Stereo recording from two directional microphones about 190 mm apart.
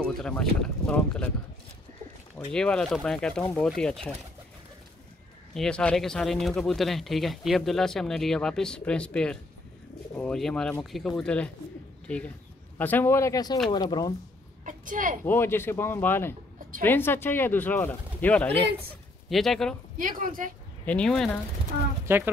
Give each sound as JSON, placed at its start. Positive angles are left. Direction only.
{"t": 0.2, "sound": "speech", "side_deg": 5}
{"t": 2.3, "sound": "speech", "side_deg": 5}
{"t": 5.5, "sound": "speech", "side_deg": 5}
{"t": 12.7, "sound": "speech", "side_deg": 10}
{"t": 14.6, "sound": "a woman's voice", "side_deg": -45}
{"t": 15.2, "sound": "speech", "side_deg": 10}
{"t": 20.0, "sound": "a woman's voice", "side_deg": -45}
{"t": 20.8, "sound": "speech", "side_deg": 5}
{"t": 22.0, "sound": "speech", "side_deg": -10}